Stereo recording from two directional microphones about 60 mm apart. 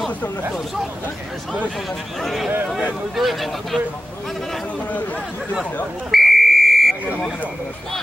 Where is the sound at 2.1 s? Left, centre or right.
Centre.